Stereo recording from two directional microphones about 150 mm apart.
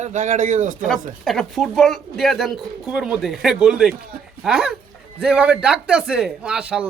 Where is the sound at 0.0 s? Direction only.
55° right (ahead or behind).